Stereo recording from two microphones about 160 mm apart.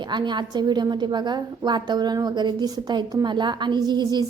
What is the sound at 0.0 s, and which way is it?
A woman's voice, 30° right (ahead or behind).